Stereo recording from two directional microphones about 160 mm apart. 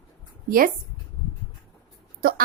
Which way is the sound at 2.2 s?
65° right (ahead or behind).